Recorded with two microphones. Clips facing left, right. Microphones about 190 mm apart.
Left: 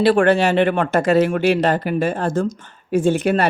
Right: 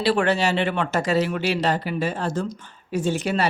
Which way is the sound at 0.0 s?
50° left (ahead or behind).